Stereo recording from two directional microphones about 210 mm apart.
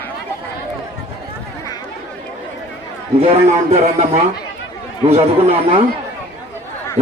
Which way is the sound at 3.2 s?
30° right (ahead or behind).